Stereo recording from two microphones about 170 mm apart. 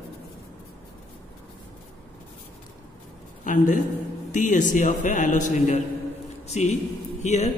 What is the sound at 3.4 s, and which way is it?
A man's voice, 50° left (ahead or behind).